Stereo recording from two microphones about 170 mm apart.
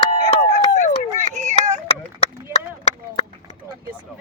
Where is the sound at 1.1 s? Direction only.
45° right (ahead or behind).